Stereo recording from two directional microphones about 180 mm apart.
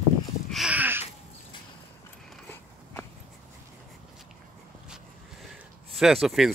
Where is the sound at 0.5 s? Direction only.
5° right (ahead or behind).